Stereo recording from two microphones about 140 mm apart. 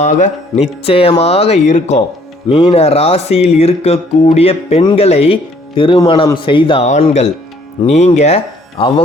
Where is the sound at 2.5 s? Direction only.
45° left (ahead or behind).